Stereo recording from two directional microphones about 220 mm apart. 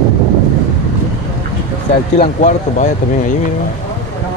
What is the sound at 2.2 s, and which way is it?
Speech, 35° left (ahead or behind).